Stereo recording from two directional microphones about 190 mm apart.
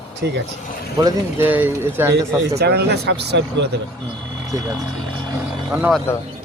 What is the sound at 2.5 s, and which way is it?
Speech, 60° right (ahead or behind).